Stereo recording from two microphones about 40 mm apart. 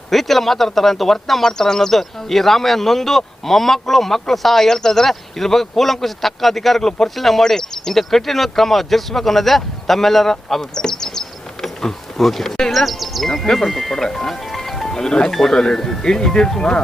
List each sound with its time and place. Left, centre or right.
0.1 s speech: centre